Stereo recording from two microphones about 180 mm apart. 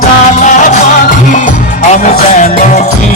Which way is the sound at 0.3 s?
45° left (ahead or behind).